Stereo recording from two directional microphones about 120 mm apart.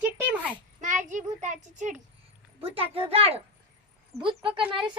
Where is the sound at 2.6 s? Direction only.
50° right (ahead or behind).